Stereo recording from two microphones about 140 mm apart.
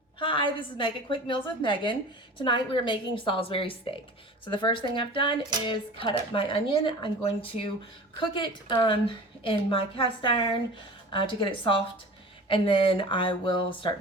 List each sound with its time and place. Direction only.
0.2 s speech: 35° left (ahead or behind)